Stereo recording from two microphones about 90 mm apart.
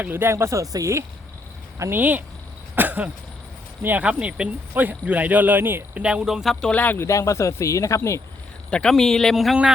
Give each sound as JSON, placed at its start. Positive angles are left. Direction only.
{"t": 0.0, "sound": "speech", "side_deg": -25}
{"t": 1.8, "sound": "speech", "side_deg": -20}
{"t": 2.7, "sound": "a sound", "side_deg": -20}
{"t": 3.8, "sound": "speech", "side_deg": -15}
{"t": 6.0, "sound": "speech", "side_deg": -10}
{"t": 7.0, "sound": "speech", "side_deg": 35}
{"t": 8.7, "sound": "speech", "side_deg": 5}